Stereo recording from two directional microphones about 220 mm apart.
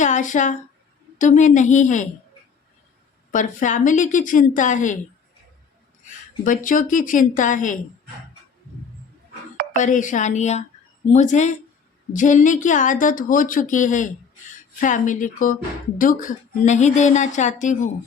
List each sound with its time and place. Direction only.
0.0 s a woman's voice: 35° left (ahead or behind)
3.3 s a woman's voice: 35° left (ahead or behind)
6.4 s a woman's voice: 35° left (ahead or behind)
9.7 s a woman's voice: 35° left (ahead or behind)